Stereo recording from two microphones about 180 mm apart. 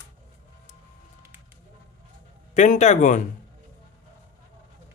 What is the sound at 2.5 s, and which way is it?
Speech, 40° left (ahead or behind).